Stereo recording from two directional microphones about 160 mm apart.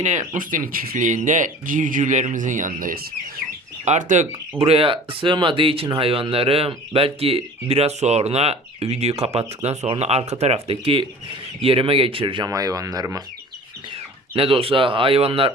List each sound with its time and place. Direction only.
0.0 s speech: 50° right (ahead or behind)
3.8 s speech: 50° right (ahead or behind)
4.6 s speech: 35° right (ahead or behind)
13.9 s speech: 35° right (ahead or behind)